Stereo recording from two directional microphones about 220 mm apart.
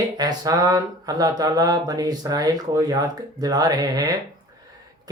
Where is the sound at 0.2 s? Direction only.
15° right (ahead or behind).